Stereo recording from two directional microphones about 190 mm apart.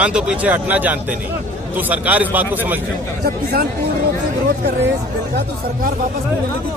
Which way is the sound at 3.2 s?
50° right (ahead or behind).